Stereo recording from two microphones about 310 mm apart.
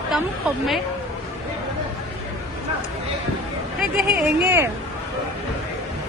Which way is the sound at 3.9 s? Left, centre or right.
Centre.